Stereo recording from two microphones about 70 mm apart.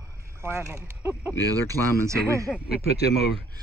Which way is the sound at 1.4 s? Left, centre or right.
Right.